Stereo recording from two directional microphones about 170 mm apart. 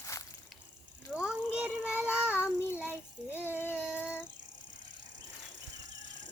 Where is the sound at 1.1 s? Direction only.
5° right (ahead or behind).